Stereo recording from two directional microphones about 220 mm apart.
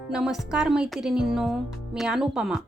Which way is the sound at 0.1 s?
5° right (ahead or behind).